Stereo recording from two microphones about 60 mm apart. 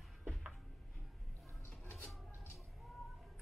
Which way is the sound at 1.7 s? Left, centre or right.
Left.